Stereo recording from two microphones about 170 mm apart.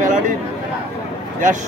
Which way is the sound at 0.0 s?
50° right (ahead or behind).